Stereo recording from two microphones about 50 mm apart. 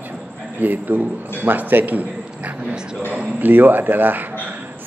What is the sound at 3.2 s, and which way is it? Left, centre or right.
A man's voice, right.